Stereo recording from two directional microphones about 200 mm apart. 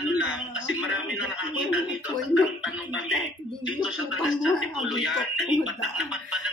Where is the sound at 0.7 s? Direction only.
5° right (ahead or behind).